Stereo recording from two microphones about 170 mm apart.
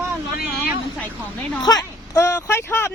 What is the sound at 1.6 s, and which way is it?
Speech, 20° left (ahead or behind).